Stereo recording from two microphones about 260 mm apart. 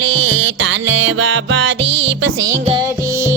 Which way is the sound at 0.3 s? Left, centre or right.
Right.